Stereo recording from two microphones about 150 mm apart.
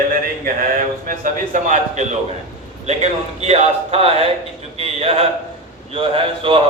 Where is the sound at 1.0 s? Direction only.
60° right (ahead or behind).